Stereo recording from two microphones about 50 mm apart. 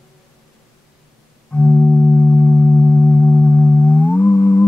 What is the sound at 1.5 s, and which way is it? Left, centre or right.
Singing bowl, centre.